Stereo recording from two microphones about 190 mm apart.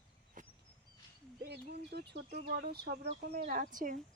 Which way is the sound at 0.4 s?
45° right (ahead or behind).